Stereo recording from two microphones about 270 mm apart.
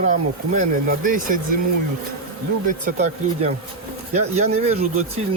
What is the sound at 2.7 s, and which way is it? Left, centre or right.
Speech, right.